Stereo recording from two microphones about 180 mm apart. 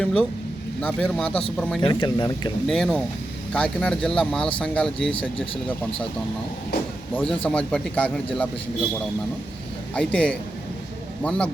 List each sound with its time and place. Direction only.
0.0 s a man's voice: 5° left (ahead or behind)
1.8 s speech: 25° left (ahead or behind)
2.6 s a man's voice: centre (ahead or behind)
7.2 s a man's voice: 5° left (ahead or behind)
9.9 s a man's voice: 5° left (ahead or behind)